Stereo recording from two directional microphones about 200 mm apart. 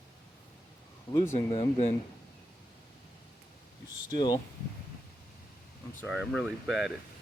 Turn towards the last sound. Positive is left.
turn(degrees=0)  # may be behind; listen again after turning